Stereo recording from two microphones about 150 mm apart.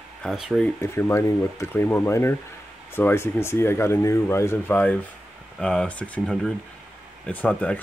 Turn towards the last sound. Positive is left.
turn(degrees=10)  # may be behind; listen again after turning